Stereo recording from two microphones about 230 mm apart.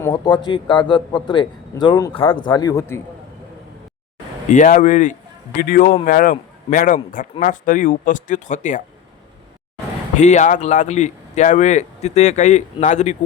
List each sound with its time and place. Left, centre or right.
0.0 s a man's voice: centre
4.4 s speech: left
10.2 s speech: left